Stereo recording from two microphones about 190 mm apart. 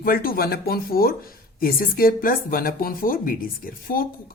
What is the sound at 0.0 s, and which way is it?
Speech, 50° left (ahead or behind).